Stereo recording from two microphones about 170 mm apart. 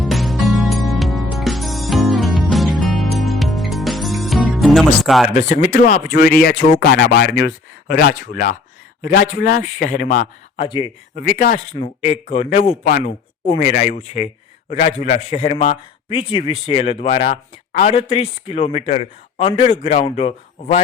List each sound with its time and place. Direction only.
0.0 s music: centre (ahead or behind)
5.3 s a man's voice: 45° left (ahead or behind)
6.1 s a man's voice: 65° left (ahead or behind)
10.6 s speech: 30° left (ahead or behind)
11.1 s a man's voice: 50° left (ahead or behind)
11.7 s a man's voice: 30° left (ahead or behind)